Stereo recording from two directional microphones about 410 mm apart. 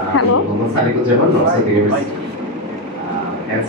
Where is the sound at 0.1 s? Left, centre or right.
Left.